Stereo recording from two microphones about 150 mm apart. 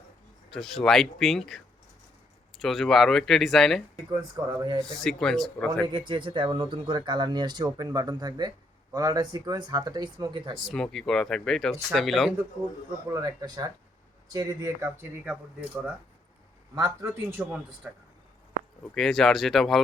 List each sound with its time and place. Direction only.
0.5 s speech: centre (ahead or behind)
3.9 s speech: 25° right (ahead or behind)
4.9 s speech: 5° left (ahead or behind)
5.9 s speech: 35° right (ahead or behind)
10.6 s speech: 5° left (ahead or behind)
13.1 s speech: 20° right (ahead or behind)
16.7 s speech: 20° right (ahead or behind)
18.9 s speech: centre (ahead or behind)